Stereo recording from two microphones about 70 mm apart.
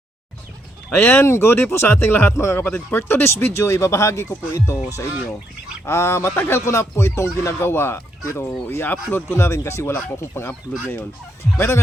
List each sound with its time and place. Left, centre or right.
0.9 s speech: left
2.3 s speech: left
6.7 s speech: left
8.2 s speech: left
8.7 s speech: left
11.5 s speech: left